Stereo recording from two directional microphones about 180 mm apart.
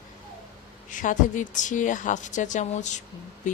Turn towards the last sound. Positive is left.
turn(degrees=45)  # may be behind; listen again after turning